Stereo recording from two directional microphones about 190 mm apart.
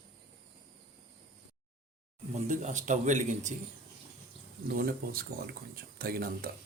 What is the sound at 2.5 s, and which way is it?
Speech, 40° right (ahead or behind).